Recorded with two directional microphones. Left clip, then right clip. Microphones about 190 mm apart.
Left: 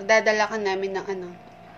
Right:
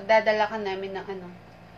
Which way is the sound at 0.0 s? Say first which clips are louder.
Left 1 dB; 35° left (ahead or behind).